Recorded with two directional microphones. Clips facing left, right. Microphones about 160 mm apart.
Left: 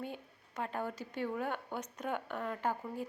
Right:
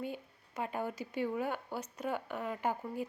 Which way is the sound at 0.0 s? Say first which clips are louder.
Right 2 dB; 5° right (ahead or behind).